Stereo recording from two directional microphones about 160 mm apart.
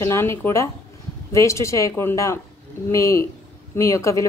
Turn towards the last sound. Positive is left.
turn(degrees=20)  # may be behind; listen again after turning